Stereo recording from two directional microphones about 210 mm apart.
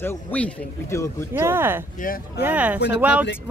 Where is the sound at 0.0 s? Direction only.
10° left (ahead or behind).